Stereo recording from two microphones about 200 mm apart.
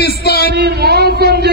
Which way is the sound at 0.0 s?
50° left (ahead or behind).